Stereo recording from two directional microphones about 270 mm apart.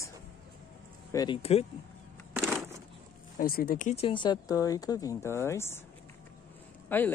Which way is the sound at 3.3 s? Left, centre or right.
Left.